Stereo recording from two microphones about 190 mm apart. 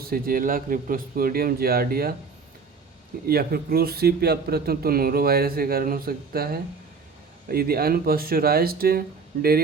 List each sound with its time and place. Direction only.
0.0 s a man's voice: 50° right (ahead or behind)
3.2 s a man's voice: 55° right (ahead or behind)